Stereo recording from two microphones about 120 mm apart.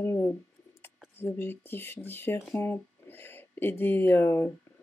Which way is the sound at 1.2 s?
15° left (ahead or behind).